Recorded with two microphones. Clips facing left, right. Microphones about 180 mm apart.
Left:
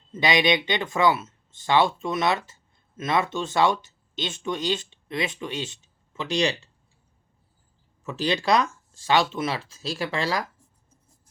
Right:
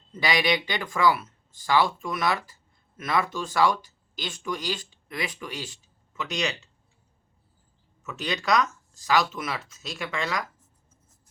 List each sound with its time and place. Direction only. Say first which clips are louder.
0.1 s speech: left 3 dB; 20° left (ahead or behind)
8.0 s speech: left 5 dB; 30° left (ahead or behind)